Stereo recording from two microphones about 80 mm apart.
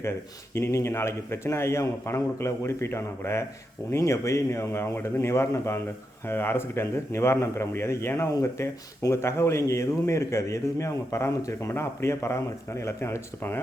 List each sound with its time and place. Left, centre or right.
0.5 s a man's voice: left